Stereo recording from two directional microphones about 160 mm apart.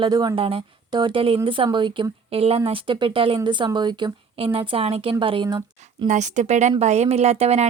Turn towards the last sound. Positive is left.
turn(degrees=-40)  # may be behind; listen again after turning